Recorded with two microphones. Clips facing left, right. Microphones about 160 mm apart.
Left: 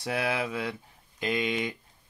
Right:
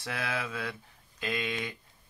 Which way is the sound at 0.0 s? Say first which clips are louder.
Left 6 dB; 15° left (ahead or behind).